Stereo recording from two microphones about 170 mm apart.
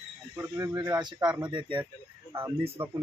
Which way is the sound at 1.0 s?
25° right (ahead or behind).